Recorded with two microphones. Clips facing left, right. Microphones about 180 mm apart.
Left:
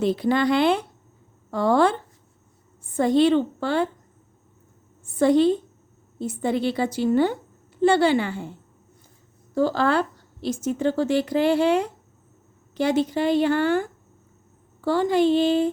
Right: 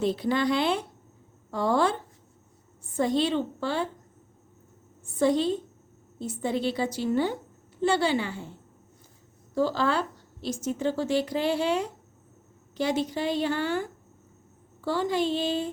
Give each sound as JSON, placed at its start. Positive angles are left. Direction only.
{"t": 0.0, "sound": "a woman's voice", "side_deg": 60}
{"t": 5.2, "sound": "a woman's voice", "side_deg": 60}
{"t": 9.6, "sound": "a woman's voice", "side_deg": 55}